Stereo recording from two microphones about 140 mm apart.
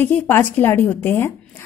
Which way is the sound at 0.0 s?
15° left (ahead or behind).